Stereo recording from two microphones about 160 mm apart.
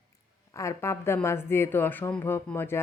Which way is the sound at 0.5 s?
20° left (ahead or behind).